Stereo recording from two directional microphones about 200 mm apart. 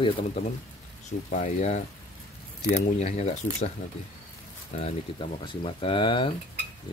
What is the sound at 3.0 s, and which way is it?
Speech, 30° left (ahead or behind).